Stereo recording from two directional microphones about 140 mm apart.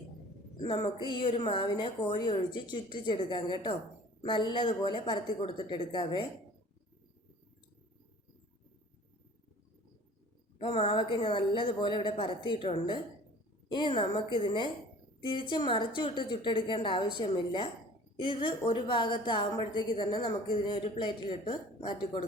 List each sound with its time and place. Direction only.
0.6 s a woman's voice: 35° left (ahead or behind)
10.6 s a woman's voice: 45° left (ahead or behind)